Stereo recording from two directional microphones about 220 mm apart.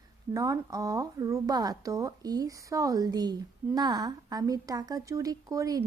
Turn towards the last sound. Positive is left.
turn(degrees=-15)  # may be behind; listen again after turning